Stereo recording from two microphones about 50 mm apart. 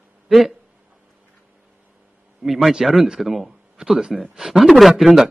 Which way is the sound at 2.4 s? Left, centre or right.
Centre.